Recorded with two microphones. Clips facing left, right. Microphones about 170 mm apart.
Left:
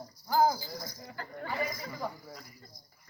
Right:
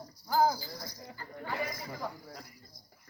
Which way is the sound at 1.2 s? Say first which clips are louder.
Left 8 dB; 70° left (ahead or behind).